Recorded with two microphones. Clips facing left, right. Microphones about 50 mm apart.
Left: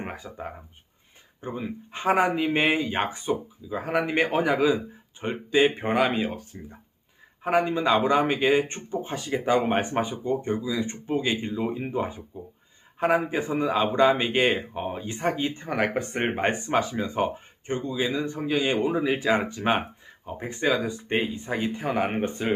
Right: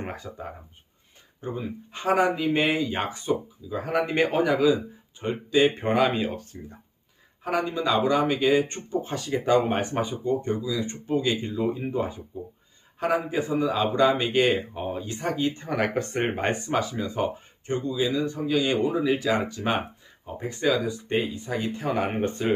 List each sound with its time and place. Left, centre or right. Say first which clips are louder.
0.0 s speech: right 1 dB; centre
1.4 s speech: even; centre
5.6 s speech: right 1 dB; centre
7.4 s speech: left 3 dB; left
16.7 s speech: left 2 dB; left; by 22.5 s centre